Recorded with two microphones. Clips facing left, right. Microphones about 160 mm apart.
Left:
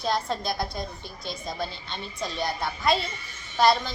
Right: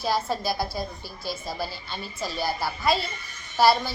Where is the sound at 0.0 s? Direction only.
5° right (ahead or behind).